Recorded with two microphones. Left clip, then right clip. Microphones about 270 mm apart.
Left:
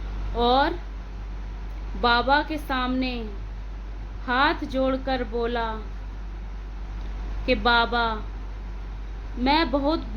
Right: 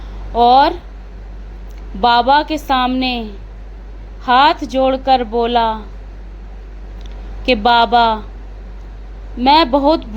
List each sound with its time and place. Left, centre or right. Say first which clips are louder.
0.3 s speech: right 12 dB; right
2.0 s speech: right 9 dB; right
4.3 s speech: right 11 dB; right
7.4 s speech: right 9 dB; right
9.4 s speech: right 11 dB; right